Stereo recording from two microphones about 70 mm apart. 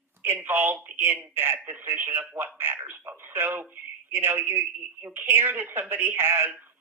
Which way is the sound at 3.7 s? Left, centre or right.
Right.